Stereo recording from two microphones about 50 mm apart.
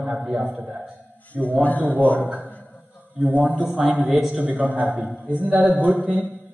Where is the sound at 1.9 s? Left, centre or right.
Left.